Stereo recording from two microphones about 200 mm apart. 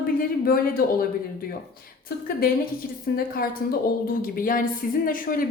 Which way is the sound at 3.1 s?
50° left (ahead or behind).